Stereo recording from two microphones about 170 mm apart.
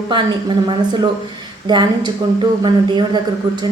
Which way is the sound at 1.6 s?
25° right (ahead or behind).